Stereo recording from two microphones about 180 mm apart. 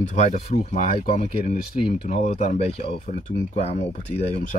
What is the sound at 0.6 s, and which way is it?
Speech, 35° left (ahead or behind).